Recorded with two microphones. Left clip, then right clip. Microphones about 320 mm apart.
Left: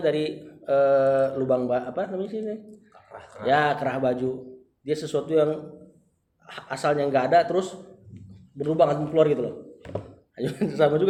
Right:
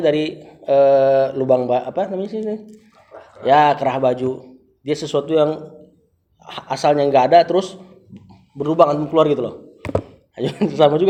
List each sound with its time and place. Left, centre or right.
0.0 s speech: right